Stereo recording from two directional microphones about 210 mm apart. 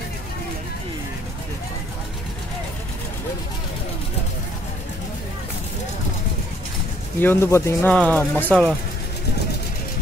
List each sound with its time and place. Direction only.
7.2 s speech: 10° left (ahead or behind)